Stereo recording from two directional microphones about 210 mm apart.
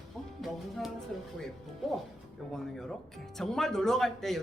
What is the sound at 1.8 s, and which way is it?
Speech, centre (ahead or behind).